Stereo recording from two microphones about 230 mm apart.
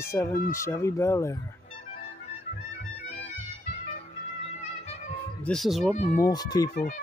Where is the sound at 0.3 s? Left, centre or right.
Left.